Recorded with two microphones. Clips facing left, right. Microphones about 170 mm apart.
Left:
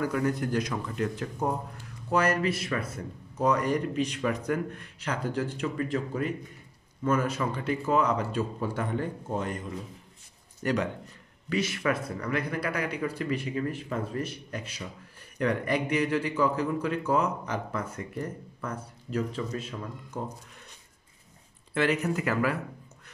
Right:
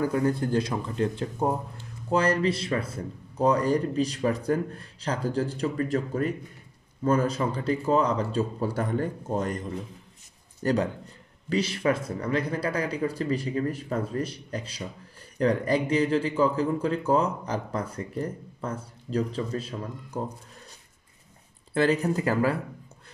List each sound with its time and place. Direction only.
0.0 s a man's voice: 30° right (ahead or behind)
21.7 s a man's voice: 35° right (ahead or behind)